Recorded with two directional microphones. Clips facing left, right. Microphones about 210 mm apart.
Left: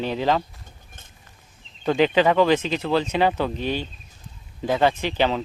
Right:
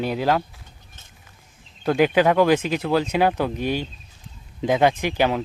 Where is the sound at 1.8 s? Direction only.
10° right (ahead or behind).